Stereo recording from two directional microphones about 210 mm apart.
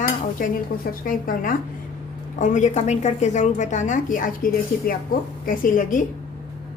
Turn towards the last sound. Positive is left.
turn(degrees=40)  # may be behind; listen again after turning